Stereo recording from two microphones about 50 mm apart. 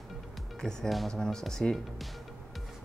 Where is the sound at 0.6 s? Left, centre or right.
Centre.